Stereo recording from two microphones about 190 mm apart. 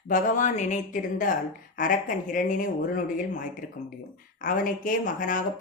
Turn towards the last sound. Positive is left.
turn(degrees=45)  # may be behind; listen again after turning